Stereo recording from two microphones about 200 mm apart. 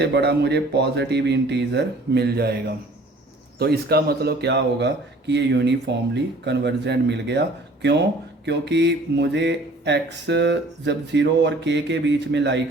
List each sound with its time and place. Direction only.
0.0 s a man's voice: 55° right (ahead or behind)